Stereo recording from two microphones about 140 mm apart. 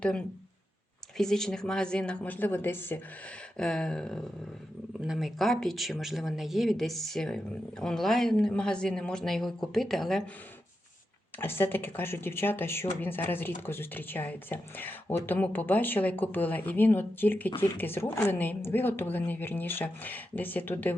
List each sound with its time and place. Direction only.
0.0 s speech: 5° left (ahead or behind)
11.3 s speech: 15° left (ahead or behind)